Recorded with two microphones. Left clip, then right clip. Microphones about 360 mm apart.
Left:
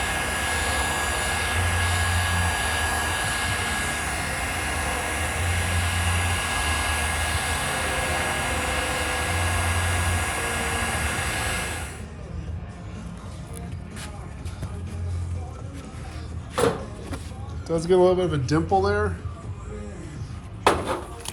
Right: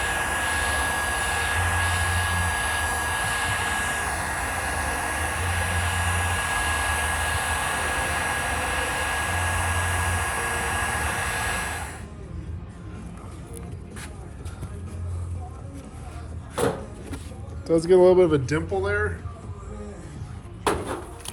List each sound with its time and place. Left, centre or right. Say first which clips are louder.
0.0 s vehicle: right 1 dB; centre
16.6 s a sound: left 3 dB; centre
17.7 s speech: right 3 dB; right
18.3 s speech: right 6 dB; centre
18.9 s speech: left 1 dB; centre
20.7 s a sound: left 4 dB; centre